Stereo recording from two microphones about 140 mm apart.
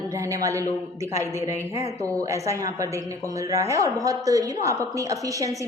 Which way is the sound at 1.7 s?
45° left (ahead or behind).